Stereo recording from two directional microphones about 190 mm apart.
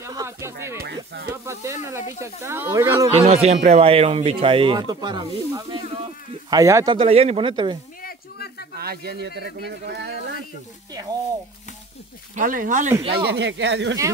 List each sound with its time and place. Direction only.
0.0 s a sound: 15° right (ahead or behind)
0.7 s speech: 55° right (ahead or behind)
1.3 s speech: 15° right (ahead or behind)
3.1 s speech: 35° right (ahead or behind); by 7.0 s 15° right (ahead or behind)
7.0 s speech: 30° right (ahead or behind)
8.0 s a sound: 55° left (ahead or behind)
8.7 s speech: 55° right (ahead or behind)
10.9 s speech: 20° right (ahead or behind)
12.4 s speech: 45° right (ahead or behind)
13.3 s speech: 65° right (ahead or behind)